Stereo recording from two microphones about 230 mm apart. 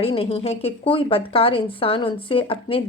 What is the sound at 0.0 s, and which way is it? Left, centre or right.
A woman's voice, left.